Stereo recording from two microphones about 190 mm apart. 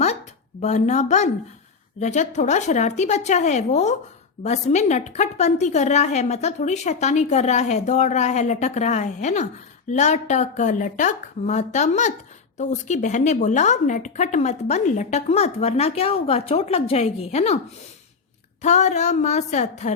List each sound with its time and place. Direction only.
0.6 s speech: 35° left (ahead or behind)
18.6 s speech: 35° left (ahead or behind)